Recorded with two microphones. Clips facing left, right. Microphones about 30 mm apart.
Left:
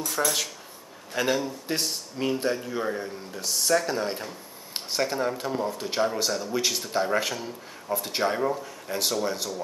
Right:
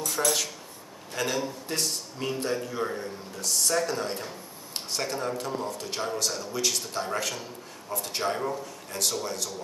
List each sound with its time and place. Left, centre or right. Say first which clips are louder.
0.0 s speech: left 1 dB; centre